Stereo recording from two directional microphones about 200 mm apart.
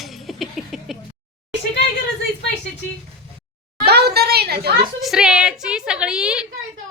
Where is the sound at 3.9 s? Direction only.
55° right (ahead or behind).